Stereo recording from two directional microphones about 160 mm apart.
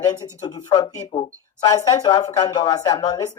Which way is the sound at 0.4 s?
25° left (ahead or behind).